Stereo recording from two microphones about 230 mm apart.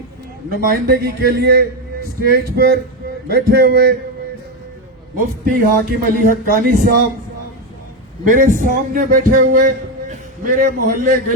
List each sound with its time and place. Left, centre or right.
0.5 s a man's voice: right
5.1 s speech: right
8.3 s a man's voice: right